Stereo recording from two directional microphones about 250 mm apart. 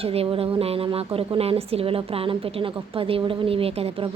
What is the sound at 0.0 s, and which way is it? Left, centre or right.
A woman's voice, right.